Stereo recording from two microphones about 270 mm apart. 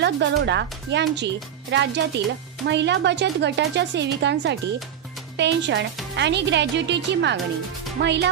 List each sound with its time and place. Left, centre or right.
0.0 s speech: right